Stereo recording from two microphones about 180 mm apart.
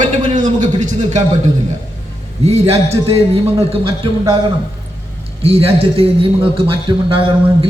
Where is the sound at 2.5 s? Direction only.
35° right (ahead or behind).